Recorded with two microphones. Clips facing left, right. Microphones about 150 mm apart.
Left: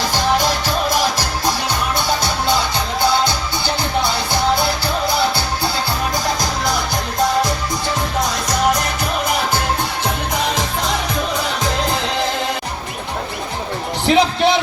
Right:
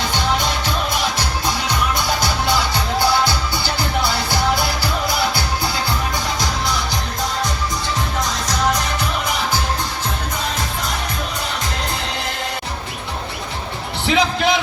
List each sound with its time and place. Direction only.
0.1 s music: 35° left (ahead or behind)
2.0 s music: 25° left (ahead or behind)
4.0 s music: 20° left (ahead or behind)
14.0 s a sound: 40° left (ahead or behind)